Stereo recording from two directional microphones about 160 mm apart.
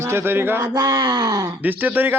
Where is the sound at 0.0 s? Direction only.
15° right (ahead or behind).